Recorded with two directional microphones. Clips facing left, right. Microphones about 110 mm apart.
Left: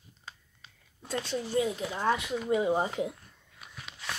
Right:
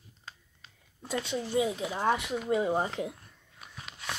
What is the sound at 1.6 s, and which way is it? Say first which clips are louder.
Speech: right 1 dB; 15° right (ahead or behind).